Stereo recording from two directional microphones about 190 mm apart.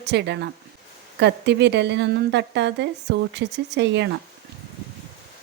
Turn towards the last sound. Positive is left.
turn(degrees=-65)  # may be behind; listen again after turning